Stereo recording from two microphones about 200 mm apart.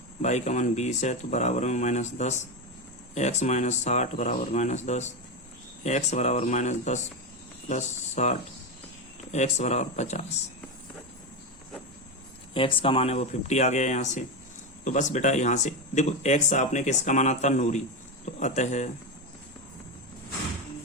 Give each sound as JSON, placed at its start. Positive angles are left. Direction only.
{"t": 0.2, "sound": "speech", "side_deg": 35}
{"t": 12.5, "sound": "speech", "side_deg": 25}